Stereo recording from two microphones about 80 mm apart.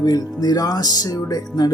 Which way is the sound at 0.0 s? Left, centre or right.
Left.